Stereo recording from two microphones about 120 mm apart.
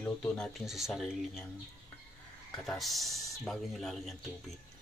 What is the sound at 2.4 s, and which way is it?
A man's voice, centre (ahead or behind).